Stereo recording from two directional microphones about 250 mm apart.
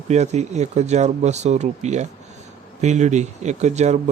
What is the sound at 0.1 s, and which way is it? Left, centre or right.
Speech, right.